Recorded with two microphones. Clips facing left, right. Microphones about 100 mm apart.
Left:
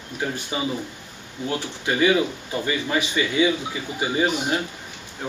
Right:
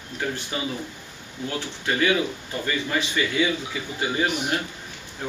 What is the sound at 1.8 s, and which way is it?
Speech, 15° left (ahead or behind).